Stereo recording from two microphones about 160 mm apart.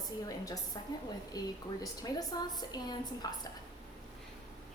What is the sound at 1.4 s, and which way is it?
A woman's voice, 25° left (ahead or behind).